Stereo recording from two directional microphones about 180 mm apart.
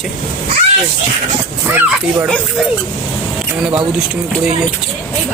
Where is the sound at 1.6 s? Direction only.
15° right (ahead or behind).